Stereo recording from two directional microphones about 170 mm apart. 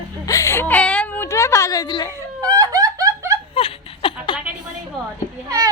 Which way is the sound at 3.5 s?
35° left (ahead or behind).